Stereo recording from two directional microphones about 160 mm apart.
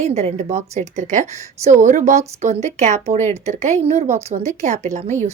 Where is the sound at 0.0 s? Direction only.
45° right (ahead or behind).